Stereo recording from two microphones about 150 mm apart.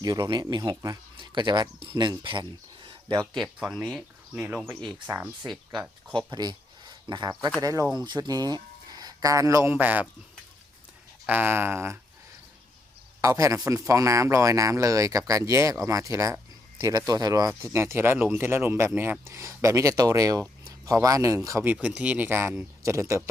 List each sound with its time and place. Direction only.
0.0 s speech: 25° right (ahead or behind)
3.3 s speech: centre (ahead or behind)
6.1 s speech: 30° right (ahead or behind)
9.7 s speech: 10° right (ahead or behind)
11.3 s speech: 15° right (ahead or behind)
13.2 s speech: 20° right (ahead or behind)